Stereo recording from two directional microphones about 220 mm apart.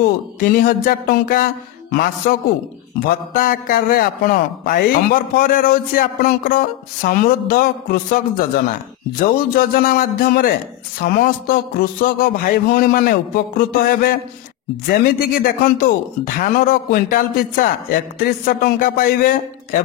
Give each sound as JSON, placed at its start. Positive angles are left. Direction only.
{"t": 0.4, "sound": "a man's voice", "side_deg": 40}
{"t": 15.4, "sound": "a man's voice", "side_deg": 40}